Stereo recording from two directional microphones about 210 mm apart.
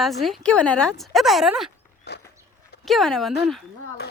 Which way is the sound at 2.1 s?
50° left (ahead or behind).